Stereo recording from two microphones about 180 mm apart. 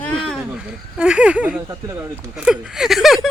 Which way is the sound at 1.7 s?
15° right (ahead or behind).